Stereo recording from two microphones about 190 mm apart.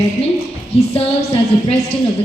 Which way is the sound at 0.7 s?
30° left (ahead or behind).